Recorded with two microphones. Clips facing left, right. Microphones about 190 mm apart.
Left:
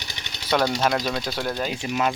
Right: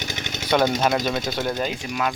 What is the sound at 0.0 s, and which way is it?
Vehicle, 50° right (ahead or behind).